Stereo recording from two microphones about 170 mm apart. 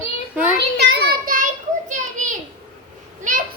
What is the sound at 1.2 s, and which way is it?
Children playing, 55° right (ahead or behind).